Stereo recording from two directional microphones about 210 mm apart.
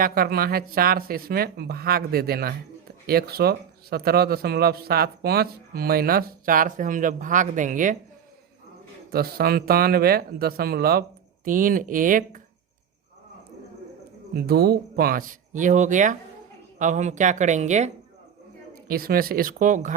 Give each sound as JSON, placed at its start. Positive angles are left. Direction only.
{"t": 0.0, "sound": "speech", "side_deg": -45}
{"t": 9.0, "sound": "speech", "side_deg": -45}
{"t": 14.3, "sound": "speech", "side_deg": -45}
{"t": 18.9, "sound": "speech", "side_deg": -45}